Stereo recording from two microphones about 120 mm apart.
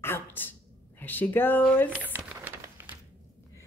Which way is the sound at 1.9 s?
15° right (ahead or behind).